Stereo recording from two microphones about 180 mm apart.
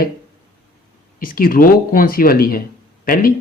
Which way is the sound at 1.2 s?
55° left (ahead or behind).